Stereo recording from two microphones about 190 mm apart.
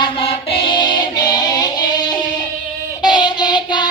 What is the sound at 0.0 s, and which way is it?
Music, 25° left (ahead or behind).